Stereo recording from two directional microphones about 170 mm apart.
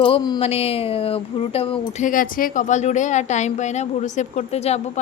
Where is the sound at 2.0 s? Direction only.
55° left (ahead or behind).